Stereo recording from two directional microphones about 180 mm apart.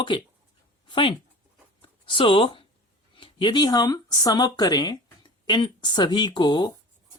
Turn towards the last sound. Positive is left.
turn(degrees=25)  # may be behind; listen again after turning